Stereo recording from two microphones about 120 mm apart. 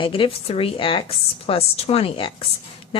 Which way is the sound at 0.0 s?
45° left (ahead or behind).